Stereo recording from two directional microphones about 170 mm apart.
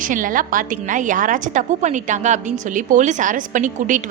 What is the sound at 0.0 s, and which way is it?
A woman's voice, 50° right (ahead or behind).